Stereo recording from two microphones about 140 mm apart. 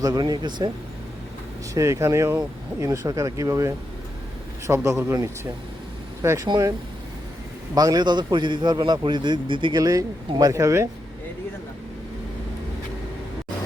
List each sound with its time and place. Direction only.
0.0 s speech: 30° right (ahead or behind)
1.7 s speech: 20° right (ahead or behind)
7.8 s a man's voice: 30° right (ahead or behind)
9.8 s speech: 25° right (ahead or behind)